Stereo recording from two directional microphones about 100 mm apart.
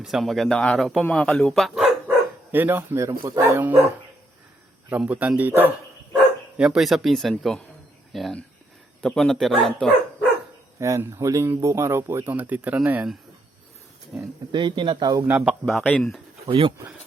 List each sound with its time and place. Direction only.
0.0 s a man's voice: centre (ahead or behind)
1.5 s speech: centre (ahead or behind)
2.0 s speech: 20° right (ahead or behind)
4.9 s speech: 15° right (ahead or behind)
6.6 s speech: 5° right (ahead or behind)
10.8 s speech: 30° right (ahead or behind)
14.1 s speech: 10° right (ahead or behind)
14.5 s speech: 50° right (ahead or behind)
15.6 s a man's voice: centre (ahead or behind)
16.5 s speech: 55° right (ahead or behind)